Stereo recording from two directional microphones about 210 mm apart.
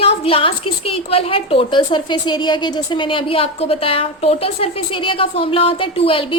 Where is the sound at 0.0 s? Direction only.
25° left (ahead or behind).